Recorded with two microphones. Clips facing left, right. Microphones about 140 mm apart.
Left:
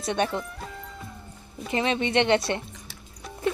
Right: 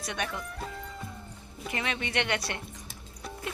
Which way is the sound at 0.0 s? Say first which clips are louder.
Left 8 dB; 30° left (ahead or behind).